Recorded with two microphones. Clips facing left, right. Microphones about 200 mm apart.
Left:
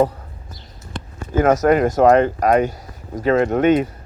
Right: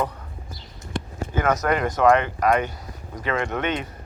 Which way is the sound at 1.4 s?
45° left (ahead or behind).